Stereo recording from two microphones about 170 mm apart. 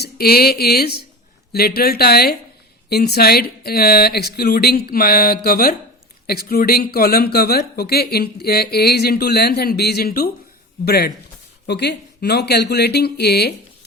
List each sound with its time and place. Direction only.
0.0 s speech: 65° left (ahead or behind)